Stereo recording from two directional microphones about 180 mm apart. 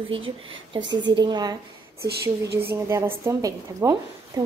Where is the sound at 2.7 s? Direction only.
15° right (ahead or behind).